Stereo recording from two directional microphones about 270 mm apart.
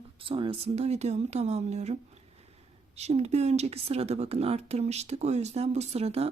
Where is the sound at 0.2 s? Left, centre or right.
Centre.